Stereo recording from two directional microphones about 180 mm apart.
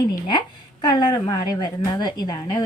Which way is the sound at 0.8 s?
25° left (ahead or behind).